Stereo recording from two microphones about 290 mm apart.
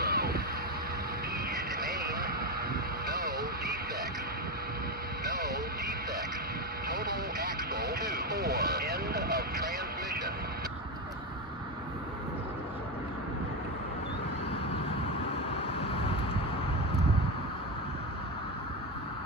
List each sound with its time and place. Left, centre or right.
0.0 s vehicle: right
1.8 s vehicle: right
5.2 s vehicle: right
6.9 s vehicle: right